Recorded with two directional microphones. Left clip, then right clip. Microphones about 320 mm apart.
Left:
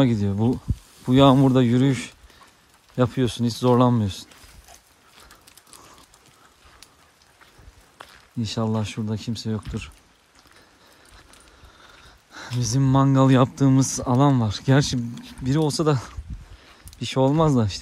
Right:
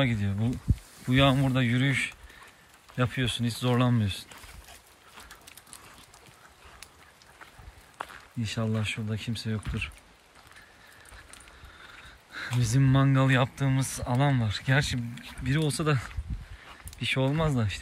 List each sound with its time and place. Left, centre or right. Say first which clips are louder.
0.0 s speech: left 8 dB; centre
8.4 s speech: left 6 dB; centre
12.3 s a sound: right 1 dB; centre
12.6 s speech: left 7 dB; centre